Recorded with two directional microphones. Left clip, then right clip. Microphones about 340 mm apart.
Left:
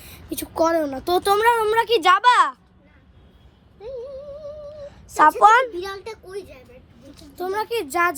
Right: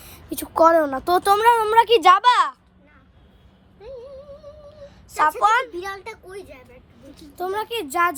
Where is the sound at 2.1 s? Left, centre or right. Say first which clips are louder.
Even; centre.